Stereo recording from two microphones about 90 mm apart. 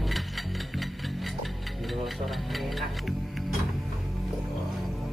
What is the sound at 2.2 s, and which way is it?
Speech, centre (ahead or behind).